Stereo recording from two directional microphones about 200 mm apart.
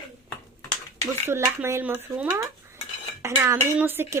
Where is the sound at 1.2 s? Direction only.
10° right (ahead or behind).